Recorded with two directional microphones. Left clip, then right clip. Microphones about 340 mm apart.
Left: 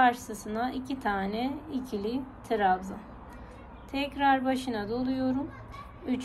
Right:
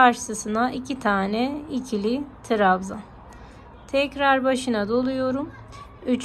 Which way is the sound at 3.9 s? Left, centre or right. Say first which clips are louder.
Right 6 dB; centre.